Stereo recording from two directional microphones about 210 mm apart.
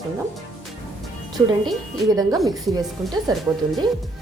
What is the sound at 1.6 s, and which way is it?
A woman's voice, 15° right (ahead or behind).